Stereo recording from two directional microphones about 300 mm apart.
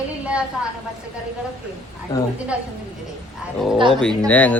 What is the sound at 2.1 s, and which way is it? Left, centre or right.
Speech, centre.